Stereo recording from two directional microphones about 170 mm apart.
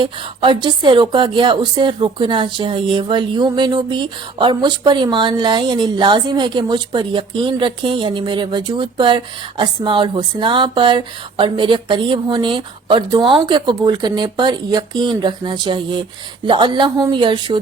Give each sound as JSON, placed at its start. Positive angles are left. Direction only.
{"t": 0.0, "sound": "a woman's voice", "side_deg": -30}